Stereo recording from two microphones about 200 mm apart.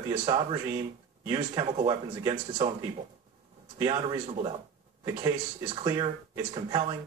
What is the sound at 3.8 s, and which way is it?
Speech, 25° right (ahead or behind).